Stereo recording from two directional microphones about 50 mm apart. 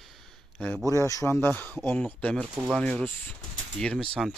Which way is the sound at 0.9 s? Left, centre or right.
Left.